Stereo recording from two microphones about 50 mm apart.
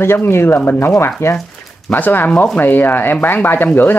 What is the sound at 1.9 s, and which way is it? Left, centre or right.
Speech, left.